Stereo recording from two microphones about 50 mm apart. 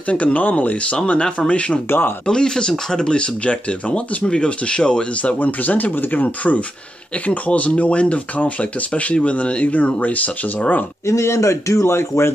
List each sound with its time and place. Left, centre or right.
0.1 s speech: left
1.9 s speech: left
2.2 s speech: centre
5.4 s speech: left
11.1 s a man's voice: left